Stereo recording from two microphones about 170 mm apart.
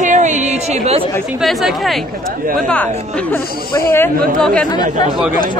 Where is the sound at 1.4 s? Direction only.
Centre (ahead or behind).